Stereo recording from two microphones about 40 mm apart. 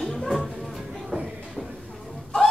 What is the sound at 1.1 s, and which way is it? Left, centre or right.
Shuffle, right.